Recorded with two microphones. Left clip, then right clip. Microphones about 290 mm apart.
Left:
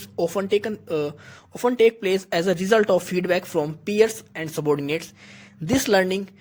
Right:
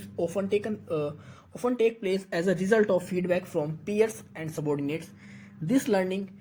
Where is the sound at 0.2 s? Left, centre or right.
Left.